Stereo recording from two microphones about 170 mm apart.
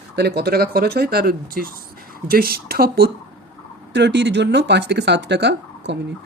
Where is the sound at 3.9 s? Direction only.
85° right.